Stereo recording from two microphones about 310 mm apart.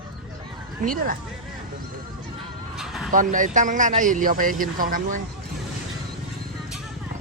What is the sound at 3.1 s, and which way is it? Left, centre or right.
A man's voice, right.